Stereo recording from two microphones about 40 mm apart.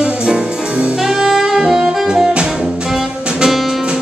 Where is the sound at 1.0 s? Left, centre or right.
Centre.